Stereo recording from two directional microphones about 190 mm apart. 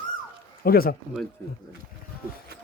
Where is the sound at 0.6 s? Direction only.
50° left (ahead or behind).